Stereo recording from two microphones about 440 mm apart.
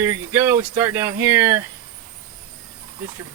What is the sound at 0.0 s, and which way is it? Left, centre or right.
Speech, centre.